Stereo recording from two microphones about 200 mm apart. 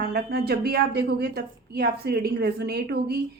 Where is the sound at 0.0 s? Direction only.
50° right (ahead or behind).